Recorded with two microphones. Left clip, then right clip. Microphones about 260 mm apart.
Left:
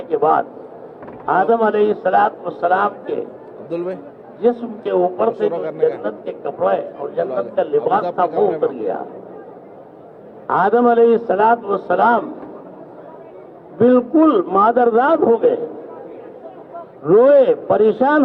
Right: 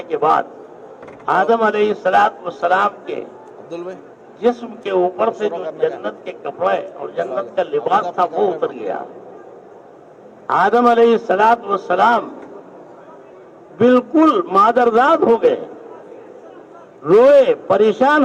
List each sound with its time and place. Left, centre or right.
0.1 s a man's voice: centre
3.7 s a man's voice: centre
4.4 s a man's voice: centre
5.5 s a man's voice: centre
6.0 s a man's voice: centre
10.4 s a man's voice: centre
13.7 s a man's voice: centre
17.1 s a man's voice: centre